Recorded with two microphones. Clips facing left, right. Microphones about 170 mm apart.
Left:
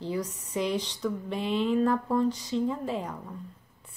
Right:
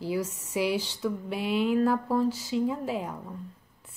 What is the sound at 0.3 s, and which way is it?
Speech, 10° left (ahead or behind).